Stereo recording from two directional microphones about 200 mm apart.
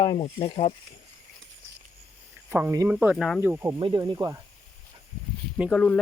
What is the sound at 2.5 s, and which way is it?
Speech, 10° right (ahead or behind).